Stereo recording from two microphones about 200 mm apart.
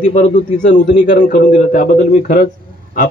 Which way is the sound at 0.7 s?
60° left (ahead or behind).